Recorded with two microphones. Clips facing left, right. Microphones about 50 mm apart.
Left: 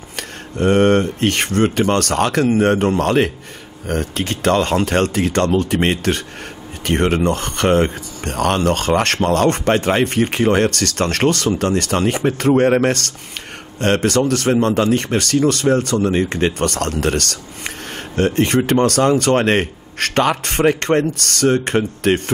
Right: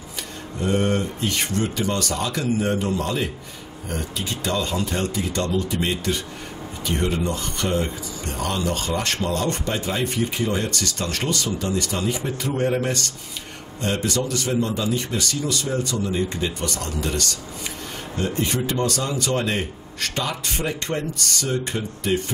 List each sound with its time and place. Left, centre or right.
0.1 s speech: left